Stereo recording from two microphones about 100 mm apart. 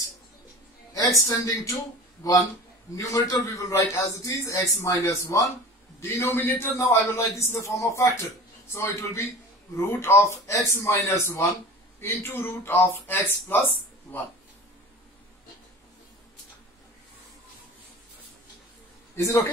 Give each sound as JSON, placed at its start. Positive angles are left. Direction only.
{"t": 0.9, "sound": "a man's voice", "side_deg": 35}
{"t": 19.1, "sound": "a man's voice", "side_deg": 30}